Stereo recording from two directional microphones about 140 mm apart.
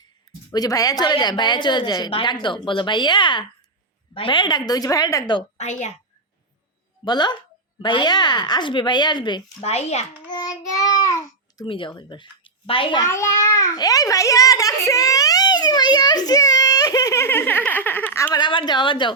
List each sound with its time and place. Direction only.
0.5 s a woman's voice: 25° left (ahead or behind)
5.5 s a woman's voice: 55° left (ahead or behind)
7.0 s a woman's voice: 30° left (ahead or behind)
9.6 s a child's voice: 50° left (ahead or behind)
10.2 s child singing: 30° left (ahead or behind)
10.7 s babbling: 25° left (ahead or behind)
11.6 s a woman's voice: 35° left (ahead or behind)
13.0 s a child's voice: 20° left (ahead or behind)
18.3 s a woman's voice: 35° left (ahead or behind)